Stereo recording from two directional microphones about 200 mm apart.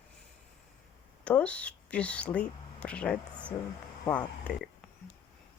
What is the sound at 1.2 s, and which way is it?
Speech, 5° left (ahead or behind).